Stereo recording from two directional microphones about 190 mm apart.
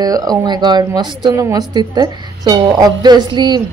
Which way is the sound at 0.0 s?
20° right (ahead or behind).